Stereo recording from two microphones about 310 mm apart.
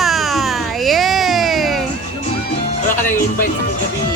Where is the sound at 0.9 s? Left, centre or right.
Centre.